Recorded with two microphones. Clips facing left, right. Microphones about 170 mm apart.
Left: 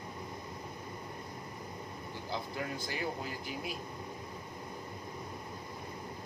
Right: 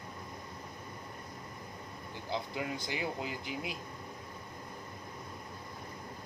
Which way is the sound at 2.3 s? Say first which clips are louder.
Right 2 dB; 20° right (ahead or behind).